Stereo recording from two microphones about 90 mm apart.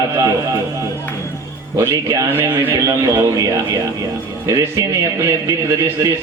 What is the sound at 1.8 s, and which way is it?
A man's voice, 40° right (ahead or behind).